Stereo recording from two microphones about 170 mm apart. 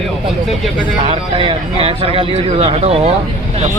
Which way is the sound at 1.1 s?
30° right (ahead or behind).